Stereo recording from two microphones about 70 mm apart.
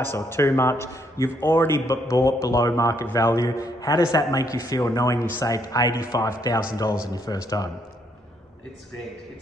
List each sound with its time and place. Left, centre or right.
0.0 s a man's voice: left
1.9 s a man's voice: left